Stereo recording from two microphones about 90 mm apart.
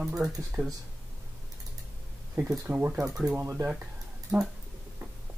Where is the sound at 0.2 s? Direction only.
25° right (ahead or behind).